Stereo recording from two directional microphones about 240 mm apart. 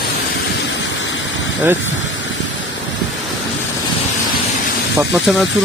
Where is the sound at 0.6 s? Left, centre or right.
Left.